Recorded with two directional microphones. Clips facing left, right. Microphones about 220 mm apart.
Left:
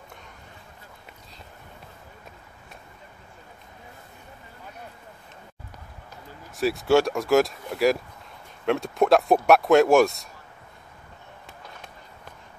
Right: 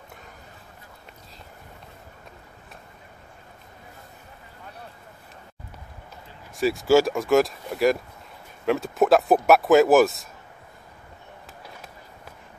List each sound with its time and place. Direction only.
6.5 s speech: centre (ahead or behind)